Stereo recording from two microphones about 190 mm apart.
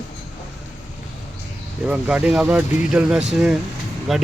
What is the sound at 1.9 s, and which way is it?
Speech, 5° right (ahead or behind).